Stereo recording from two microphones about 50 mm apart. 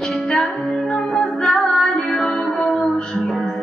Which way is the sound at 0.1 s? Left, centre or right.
Centre.